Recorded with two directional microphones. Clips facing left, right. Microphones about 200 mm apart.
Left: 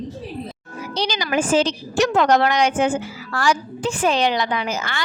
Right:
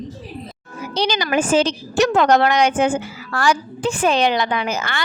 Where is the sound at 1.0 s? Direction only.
60° right (ahead or behind).